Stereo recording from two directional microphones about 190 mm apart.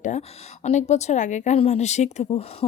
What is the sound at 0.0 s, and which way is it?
A woman's voice, 35° left (ahead or behind).